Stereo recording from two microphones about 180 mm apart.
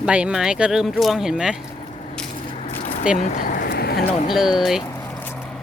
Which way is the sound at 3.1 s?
50° left (ahead or behind).